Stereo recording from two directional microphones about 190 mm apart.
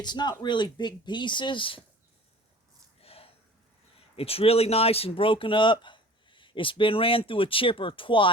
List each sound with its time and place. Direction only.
0.0 s speech: 25° left (ahead or behind)
3.0 s snort: 30° left (ahead or behind)
4.2 s speech: 30° left (ahead or behind)